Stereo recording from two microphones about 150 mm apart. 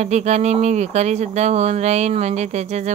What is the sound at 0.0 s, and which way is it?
Speech, 50° right (ahead or behind).